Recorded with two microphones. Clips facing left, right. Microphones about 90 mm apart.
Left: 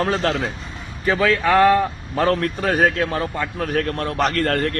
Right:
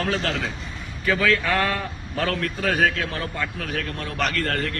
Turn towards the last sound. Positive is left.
turn(degrees=45)  # may be behind; listen again after turning